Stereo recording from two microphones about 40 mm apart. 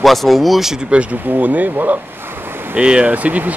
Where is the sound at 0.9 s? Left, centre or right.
Right.